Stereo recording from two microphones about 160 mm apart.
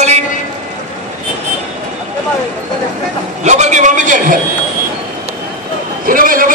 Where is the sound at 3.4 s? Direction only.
45° right (ahead or behind).